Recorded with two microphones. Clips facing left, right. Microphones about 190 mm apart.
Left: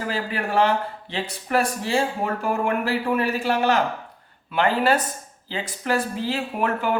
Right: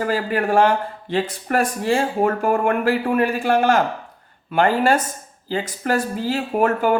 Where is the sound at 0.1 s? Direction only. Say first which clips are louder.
Right 5 dB; 45° right (ahead or behind).